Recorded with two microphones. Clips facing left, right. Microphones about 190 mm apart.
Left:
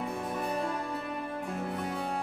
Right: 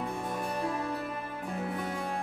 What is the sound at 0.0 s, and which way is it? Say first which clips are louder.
Music: left 1 dB; centre (ahead or behind).